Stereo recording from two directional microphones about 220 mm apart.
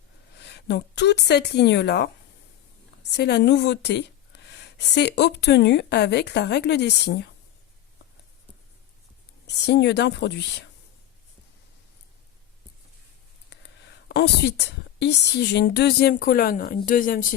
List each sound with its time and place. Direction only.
0.3 s a woman's voice: 50° left (ahead or behind)
9.5 s a woman's voice: 50° left (ahead or behind)
13.5 s speech: 50° left (ahead or behind)